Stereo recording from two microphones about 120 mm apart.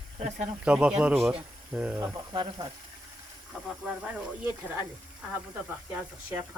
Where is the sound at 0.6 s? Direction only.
10° right (ahead or behind).